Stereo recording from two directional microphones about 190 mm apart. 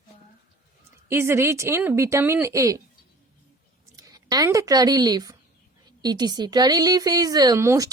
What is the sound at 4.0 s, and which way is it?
A woman's voice, 20° right (ahead or behind).